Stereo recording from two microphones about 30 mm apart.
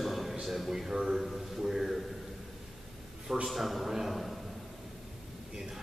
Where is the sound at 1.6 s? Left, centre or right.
Centre.